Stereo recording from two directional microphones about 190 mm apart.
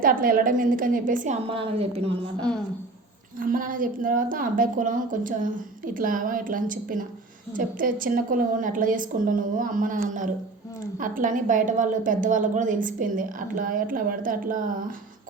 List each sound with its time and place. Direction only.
0.0 s a woman's voice: 50° right (ahead or behind)
1.5 s a woman's voice: 30° right (ahead or behind)
3.3 s a woman's voice: 45° right (ahead or behind)